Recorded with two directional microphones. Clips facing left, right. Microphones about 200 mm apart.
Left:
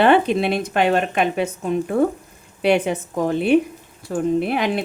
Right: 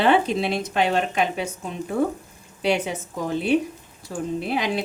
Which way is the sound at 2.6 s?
55° left (ahead or behind).